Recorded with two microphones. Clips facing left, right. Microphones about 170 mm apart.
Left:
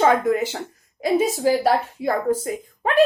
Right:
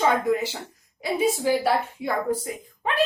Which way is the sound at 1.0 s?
40° left (ahead or behind).